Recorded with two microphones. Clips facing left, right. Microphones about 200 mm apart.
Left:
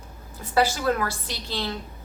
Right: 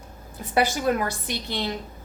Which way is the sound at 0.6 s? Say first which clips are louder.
Even; 20° right (ahead or behind).